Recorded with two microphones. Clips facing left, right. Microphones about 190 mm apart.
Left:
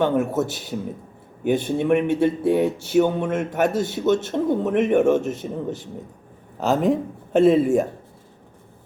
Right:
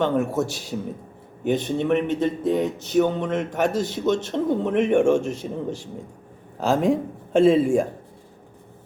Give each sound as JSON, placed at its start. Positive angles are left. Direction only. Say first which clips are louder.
{"t": 0.0, "sound": "a man's voice", "louder": "left 1 dB", "side_deg": 5}